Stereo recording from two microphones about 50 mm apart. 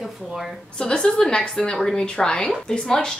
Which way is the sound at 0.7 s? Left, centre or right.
Centre.